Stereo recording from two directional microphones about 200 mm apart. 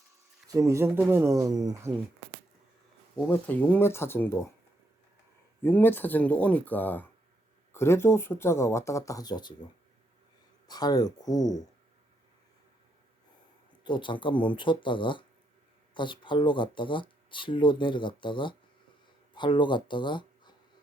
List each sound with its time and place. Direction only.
0.4 s speech: 15° right (ahead or behind)
3.2 s speech: 5° left (ahead or behind)
5.6 s speech: 10° left (ahead or behind)
10.7 s speech: 20° left (ahead or behind)
13.8 s speech: 25° left (ahead or behind)